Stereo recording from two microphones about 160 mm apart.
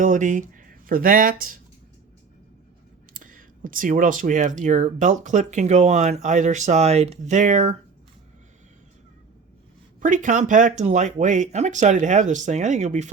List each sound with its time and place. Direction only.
0.0 s speech: 55° right (ahead or behind)
3.1 s speech: 60° right (ahead or behind)
10.0 s speech: 50° right (ahead or behind)